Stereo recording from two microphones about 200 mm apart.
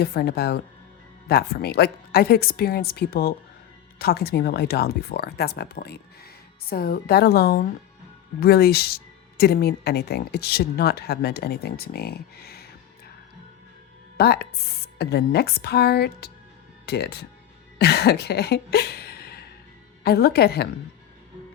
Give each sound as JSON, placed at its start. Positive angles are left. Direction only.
{"t": 0.0, "sound": "speech", "side_deg": 50}
{"t": 14.2, "sound": "speech", "side_deg": 55}
{"t": 17.7, "sound": "a sound", "side_deg": 55}
{"t": 20.1, "sound": "speech", "side_deg": 50}